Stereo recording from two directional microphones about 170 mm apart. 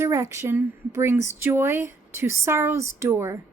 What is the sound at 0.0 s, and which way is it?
Speech, 15° right (ahead or behind).